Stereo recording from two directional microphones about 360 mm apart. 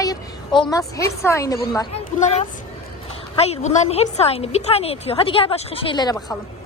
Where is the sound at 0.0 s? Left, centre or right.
Centre.